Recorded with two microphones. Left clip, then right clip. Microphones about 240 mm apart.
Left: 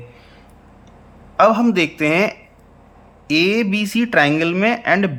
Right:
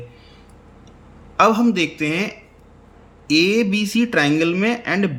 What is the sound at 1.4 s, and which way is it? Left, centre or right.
Speech, centre.